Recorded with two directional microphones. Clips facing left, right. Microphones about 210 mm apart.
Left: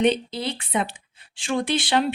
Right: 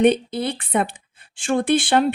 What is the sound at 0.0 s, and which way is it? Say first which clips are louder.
Speech: right 4 dB; 55° right (ahead or behind).